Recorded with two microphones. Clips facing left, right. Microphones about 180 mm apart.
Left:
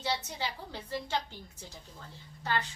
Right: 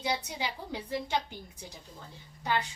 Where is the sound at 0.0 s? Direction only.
15° right (ahead or behind).